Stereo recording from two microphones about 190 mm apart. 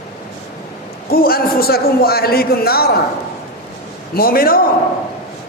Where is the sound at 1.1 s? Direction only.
50° left (ahead or behind).